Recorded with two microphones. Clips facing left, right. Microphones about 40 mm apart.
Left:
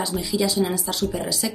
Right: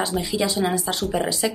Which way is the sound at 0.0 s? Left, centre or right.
Right.